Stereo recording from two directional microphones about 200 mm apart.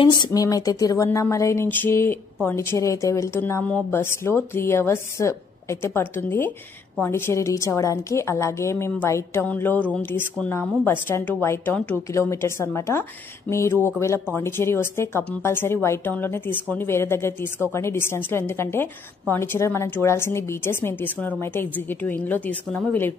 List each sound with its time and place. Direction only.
0.0 s a woman's voice: 20° left (ahead or behind)